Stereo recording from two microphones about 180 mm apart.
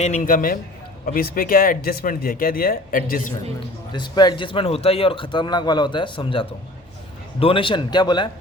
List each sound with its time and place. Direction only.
0.0 s speech: 45° left (ahead or behind)
3.9 s a man's voice: 25° left (ahead or behind)